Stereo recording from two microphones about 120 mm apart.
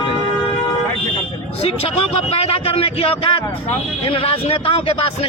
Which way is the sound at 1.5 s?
55° left (ahead or behind).